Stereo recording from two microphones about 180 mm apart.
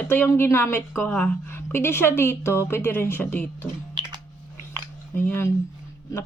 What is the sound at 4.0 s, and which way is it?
Typing, 25° right (ahead or behind).